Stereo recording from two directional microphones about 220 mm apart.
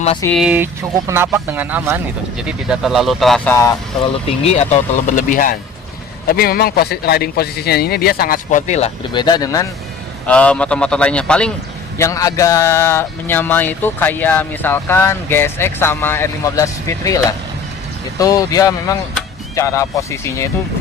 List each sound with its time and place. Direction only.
0.3 s speech: 5° right (ahead or behind); by 3.8 s 10° left (ahead or behind)
4.3 s a man's voice: 30° left (ahead or behind)
9.2 s speech: 15° left (ahead or behind)
10.2 s speech: 5° left (ahead or behind)
11.9 s speech: 15° left (ahead or behind)